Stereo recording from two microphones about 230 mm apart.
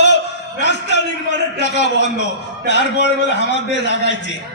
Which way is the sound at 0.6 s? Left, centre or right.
Left.